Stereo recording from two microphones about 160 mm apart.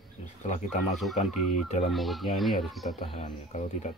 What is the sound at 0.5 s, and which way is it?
Speech, 50° left (ahead or behind).